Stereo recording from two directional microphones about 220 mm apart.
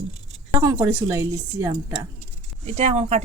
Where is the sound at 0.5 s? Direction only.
15° right (ahead or behind).